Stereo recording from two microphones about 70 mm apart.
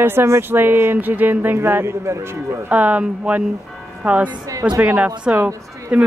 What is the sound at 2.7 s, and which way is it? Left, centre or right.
A woman's voice, centre.